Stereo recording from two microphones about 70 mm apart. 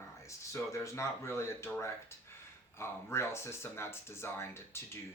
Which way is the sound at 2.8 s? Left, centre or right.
Left.